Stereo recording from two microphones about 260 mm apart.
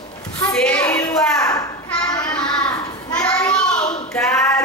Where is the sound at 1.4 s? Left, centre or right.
Centre.